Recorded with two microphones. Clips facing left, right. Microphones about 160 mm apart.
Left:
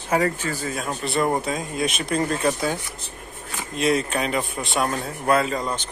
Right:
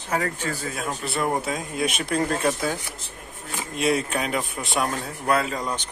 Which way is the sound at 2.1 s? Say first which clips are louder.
Left 1 dB; 10° left (ahead or behind).